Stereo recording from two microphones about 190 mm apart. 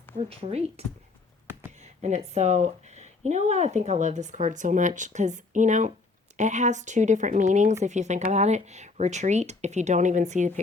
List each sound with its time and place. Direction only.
0.2 s speech: 30° right (ahead or behind)
1.8 s speech: 35° right (ahead or behind)